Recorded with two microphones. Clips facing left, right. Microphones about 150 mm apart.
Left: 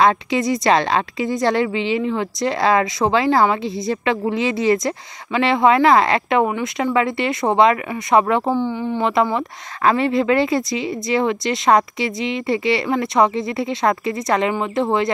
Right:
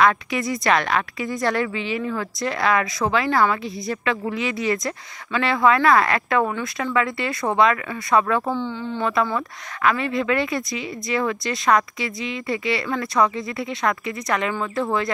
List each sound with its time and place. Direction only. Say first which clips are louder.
0.0 s speech: left 3 dB; 25° left (ahead or behind)